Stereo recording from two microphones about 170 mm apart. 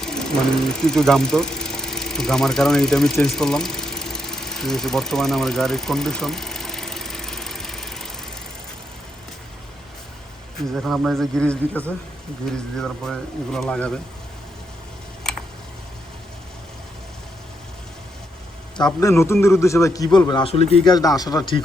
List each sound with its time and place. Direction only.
0.0 s engine: 5° left (ahead or behind)
10.8 s speech: centre (ahead or behind)
18.9 s a man's voice: 15° left (ahead or behind); by 20.9 s 35° left (ahead or behind)
20.9 s a man's voice: 20° left (ahead or behind)